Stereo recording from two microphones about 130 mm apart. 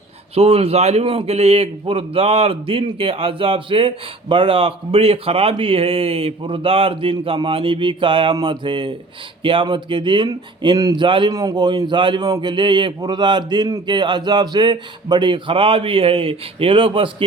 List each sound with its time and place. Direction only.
0.3 s a man's voice: 50° right (ahead or behind)